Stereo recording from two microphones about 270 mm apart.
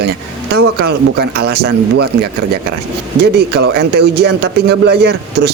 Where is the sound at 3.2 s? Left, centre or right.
Right.